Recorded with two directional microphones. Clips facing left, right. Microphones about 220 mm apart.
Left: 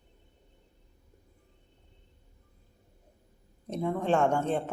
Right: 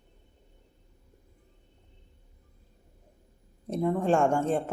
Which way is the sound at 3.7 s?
5° right (ahead or behind).